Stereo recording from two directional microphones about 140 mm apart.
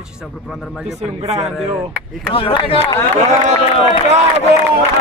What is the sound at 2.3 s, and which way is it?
Speech, 40° left (ahead or behind).